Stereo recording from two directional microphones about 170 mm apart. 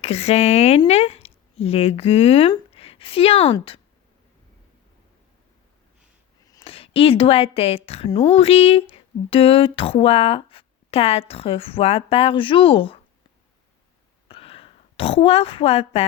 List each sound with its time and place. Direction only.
0.0 s a woman's voice: 40° left (ahead or behind)
6.7 s a woman's voice: 35° left (ahead or behind)
14.3 s a sound: 35° left (ahead or behind)